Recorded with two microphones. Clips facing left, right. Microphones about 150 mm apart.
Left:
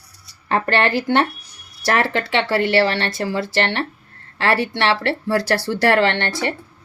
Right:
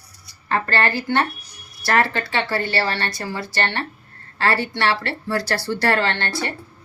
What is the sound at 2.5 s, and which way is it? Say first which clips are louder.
Speech: left 6 dB; 90° left.